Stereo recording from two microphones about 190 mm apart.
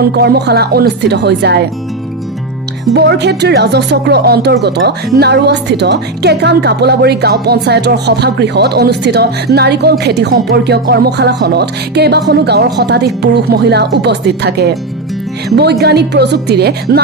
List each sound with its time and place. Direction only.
0.0 s a woman's voice: 60° right (ahead or behind)
2.9 s a woman's voice: 60° right (ahead or behind)